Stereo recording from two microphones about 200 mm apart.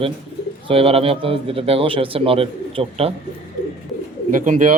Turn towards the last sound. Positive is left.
turn(degrees=-40)  # may be behind; listen again after turning